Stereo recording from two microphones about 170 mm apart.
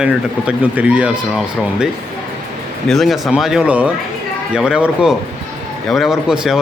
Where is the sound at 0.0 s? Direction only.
5° right (ahead or behind).